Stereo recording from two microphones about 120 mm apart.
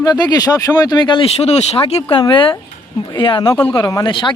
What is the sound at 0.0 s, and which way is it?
Speech, 35° left (ahead or behind).